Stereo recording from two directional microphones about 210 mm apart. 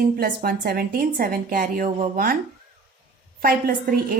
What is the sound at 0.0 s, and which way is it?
A woman's voice, 45° right (ahead or behind).